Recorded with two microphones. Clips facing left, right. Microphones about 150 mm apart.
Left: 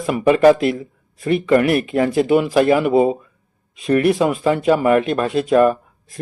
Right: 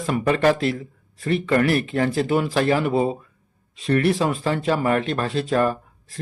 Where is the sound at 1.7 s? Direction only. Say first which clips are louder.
Left 4 dB; 35° right (ahead or behind).